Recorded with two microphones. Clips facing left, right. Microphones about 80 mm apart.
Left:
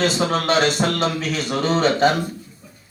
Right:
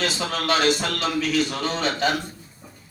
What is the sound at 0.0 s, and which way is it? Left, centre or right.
A man's voice, left.